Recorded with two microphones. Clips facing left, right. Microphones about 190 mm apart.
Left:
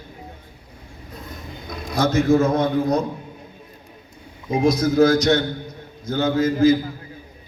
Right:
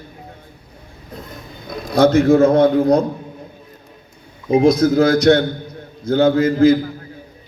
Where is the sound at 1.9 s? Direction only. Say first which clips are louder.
Right 6 dB; 60° right (ahead or behind).